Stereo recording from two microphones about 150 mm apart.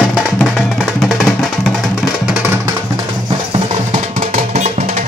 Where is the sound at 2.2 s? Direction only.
10° right (ahead or behind).